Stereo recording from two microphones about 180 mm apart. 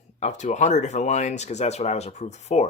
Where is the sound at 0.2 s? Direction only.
40° left (ahead or behind).